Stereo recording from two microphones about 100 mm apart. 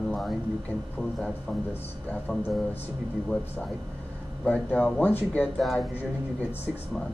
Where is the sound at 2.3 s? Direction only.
5° left (ahead or behind).